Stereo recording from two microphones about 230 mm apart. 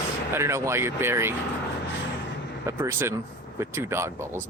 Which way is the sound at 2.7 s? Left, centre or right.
Centre.